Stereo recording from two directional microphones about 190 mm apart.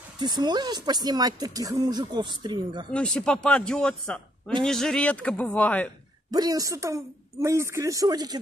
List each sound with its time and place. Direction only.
0.2 s speech: 20° right (ahead or behind)
2.9 s speech: 5° left (ahead or behind)
6.3 s a woman's voice: 20° right (ahead or behind)